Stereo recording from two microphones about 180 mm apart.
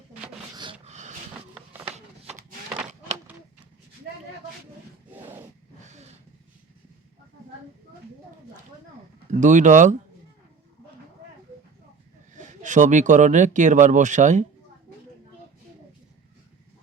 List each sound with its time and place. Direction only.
0.5 s rub: 25° right (ahead or behind)
0.9 s snort: 40° right (ahead or behind)
5.1 s a sound: 10° right (ahead or behind)
5.9 s vehicle: 35° right (ahead or behind)
9.3 s speech: 45° right (ahead or behind)
12.4 s speech: 45° right (ahead or behind)